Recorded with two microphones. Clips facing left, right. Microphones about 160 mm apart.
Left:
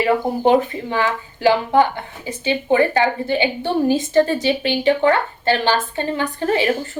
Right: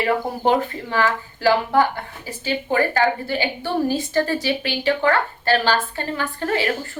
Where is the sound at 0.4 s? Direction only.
20° left (ahead or behind).